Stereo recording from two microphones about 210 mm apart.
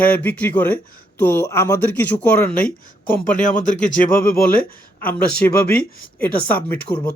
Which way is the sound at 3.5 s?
35° left (ahead or behind).